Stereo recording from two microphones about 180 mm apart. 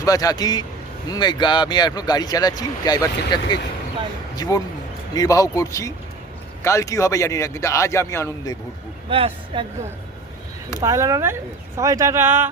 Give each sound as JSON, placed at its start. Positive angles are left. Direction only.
{"t": 0.0, "sound": "a man's voice", "side_deg": 20}
{"t": 9.0, "sound": "speech", "side_deg": -30}
{"t": 10.8, "sound": "speech", "side_deg": -15}